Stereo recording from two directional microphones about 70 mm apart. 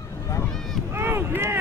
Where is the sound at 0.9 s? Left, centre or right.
Right.